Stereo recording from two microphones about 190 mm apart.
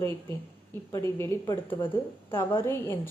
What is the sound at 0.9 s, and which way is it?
A woman's voice, 15° left (ahead or behind).